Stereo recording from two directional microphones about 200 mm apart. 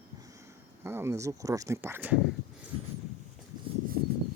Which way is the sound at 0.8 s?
10° right (ahead or behind).